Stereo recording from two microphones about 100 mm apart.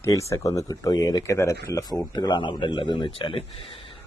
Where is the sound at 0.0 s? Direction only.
30° left (ahead or behind).